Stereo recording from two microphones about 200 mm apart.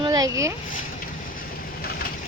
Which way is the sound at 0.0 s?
20° right (ahead or behind).